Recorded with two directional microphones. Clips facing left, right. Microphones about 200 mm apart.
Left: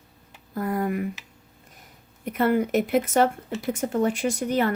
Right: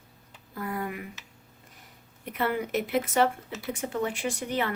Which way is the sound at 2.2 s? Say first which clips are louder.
Left 7 dB; 45° left (ahead or behind).